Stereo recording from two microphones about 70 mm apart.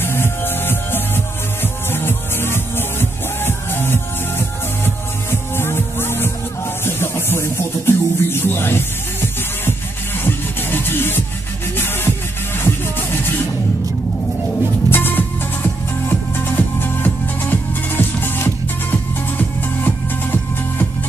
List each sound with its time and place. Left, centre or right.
0.0 s music: left
14.9 s music: left